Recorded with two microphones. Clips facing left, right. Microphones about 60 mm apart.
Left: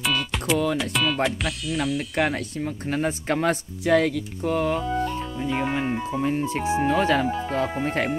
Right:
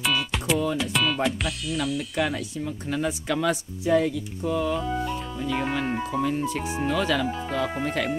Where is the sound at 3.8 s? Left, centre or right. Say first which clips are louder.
Left 2 dB; left.